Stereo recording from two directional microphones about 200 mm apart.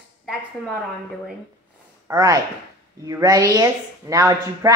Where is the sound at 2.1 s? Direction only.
15° right (ahead or behind).